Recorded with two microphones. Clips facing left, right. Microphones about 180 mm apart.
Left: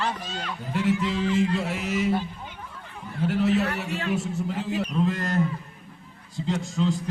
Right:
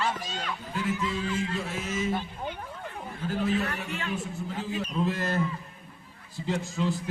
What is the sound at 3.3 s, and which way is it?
A man's voice, 75° left (ahead or behind).